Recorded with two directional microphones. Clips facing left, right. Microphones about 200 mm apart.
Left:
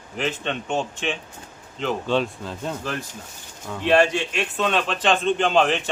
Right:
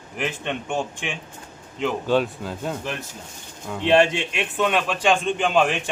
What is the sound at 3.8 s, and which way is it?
A man's voice, 20° right (ahead or behind).